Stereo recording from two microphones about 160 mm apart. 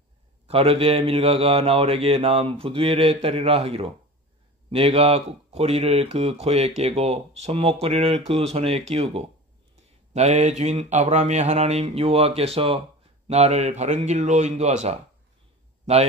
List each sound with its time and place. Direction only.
0.5 s speech: 35° right (ahead or behind)